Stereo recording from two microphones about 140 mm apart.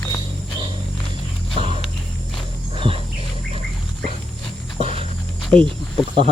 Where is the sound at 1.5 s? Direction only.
40° right (ahead or behind).